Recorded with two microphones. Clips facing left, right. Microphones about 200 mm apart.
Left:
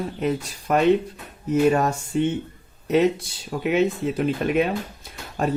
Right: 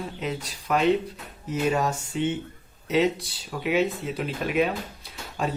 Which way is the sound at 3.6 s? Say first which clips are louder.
Left 3 dB; 50° left (ahead or behind).